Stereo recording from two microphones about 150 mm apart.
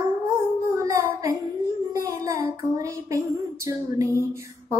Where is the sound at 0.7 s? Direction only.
20° right (ahead or behind).